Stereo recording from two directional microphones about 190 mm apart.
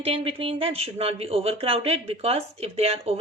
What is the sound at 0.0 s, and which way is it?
Speech, 30° right (ahead or behind).